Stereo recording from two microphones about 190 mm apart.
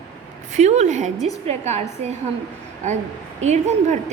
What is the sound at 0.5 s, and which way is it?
A woman's voice, 35° right (ahead or behind).